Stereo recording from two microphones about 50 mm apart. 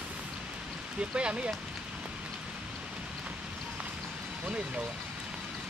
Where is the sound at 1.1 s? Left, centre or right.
Right.